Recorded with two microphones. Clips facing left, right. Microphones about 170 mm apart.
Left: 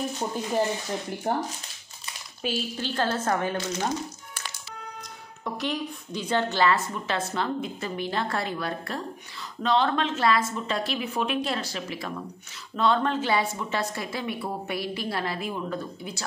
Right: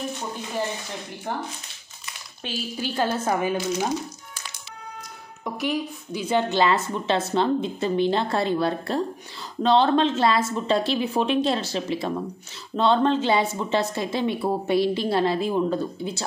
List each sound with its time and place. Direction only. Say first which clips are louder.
1.3 s speech: left 3 dB; 40° left (ahead or behind)
2.4 s speech: left 4 dB; 5° left (ahead or behind)
2.8 s speech: right 4 dB; 10° right (ahead or behind)
5.4 s speech: right 3 dB; 10° right (ahead or behind)
6.5 s a woman's voice: right 3 dB; 20° right (ahead or behind)